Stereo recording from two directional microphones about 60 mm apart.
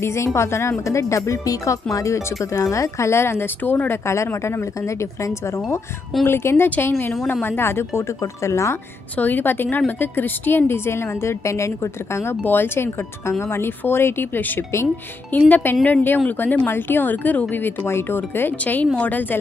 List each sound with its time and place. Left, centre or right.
0.0 s speech: left
4.0 s a woman's voice: left
6.2 s a woman's voice: left
8.2 s speech: left
9.1 s a woman's voice: left
18.6 s speech: left